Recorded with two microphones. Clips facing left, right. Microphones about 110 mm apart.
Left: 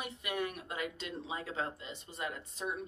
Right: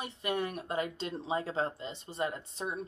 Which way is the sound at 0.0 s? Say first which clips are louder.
Right 3 dB; 30° right (ahead or behind).